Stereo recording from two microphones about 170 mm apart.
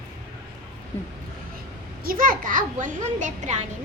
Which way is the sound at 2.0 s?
55° right (ahead or behind).